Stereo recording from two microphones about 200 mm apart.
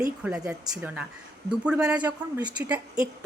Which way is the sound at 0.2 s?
5° right (ahead or behind).